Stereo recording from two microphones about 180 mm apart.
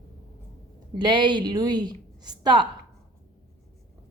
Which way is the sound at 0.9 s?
25° right (ahead or behind).